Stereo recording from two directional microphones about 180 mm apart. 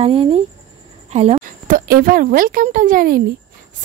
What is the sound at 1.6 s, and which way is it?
Speech, 50° right (ahead or behind).